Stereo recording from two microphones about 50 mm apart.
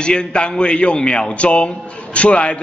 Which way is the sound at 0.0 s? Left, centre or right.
Centre.